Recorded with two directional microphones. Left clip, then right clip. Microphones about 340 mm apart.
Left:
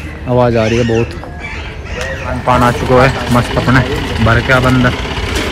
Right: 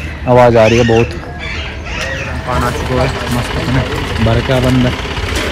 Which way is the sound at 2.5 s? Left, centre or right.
Centre.